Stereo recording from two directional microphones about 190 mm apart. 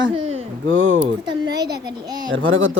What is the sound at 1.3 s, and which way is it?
Speech, 20° right (ahead or behind).